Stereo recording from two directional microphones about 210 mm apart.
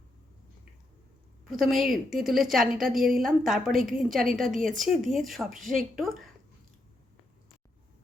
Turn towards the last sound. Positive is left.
turn(degrees=0)  # may be behind; listen again after turning